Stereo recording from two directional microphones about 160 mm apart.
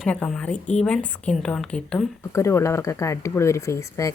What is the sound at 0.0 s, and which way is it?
A woman's voice, 5° left (ahead or behind).